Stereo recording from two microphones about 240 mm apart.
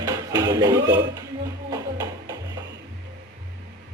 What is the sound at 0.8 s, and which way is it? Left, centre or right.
Speech, right.